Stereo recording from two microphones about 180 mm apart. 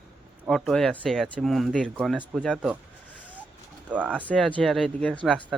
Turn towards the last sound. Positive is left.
turn(degrees=5)  # may be behind; listen again after turning